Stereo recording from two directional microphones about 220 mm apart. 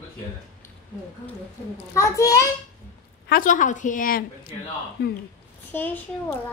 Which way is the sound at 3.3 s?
35° left (ahead or behind).